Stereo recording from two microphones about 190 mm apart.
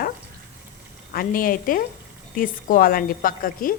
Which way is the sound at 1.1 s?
50° left (ahead or behind).